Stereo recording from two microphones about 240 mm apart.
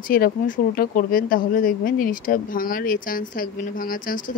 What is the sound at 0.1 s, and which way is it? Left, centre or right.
Speech, left.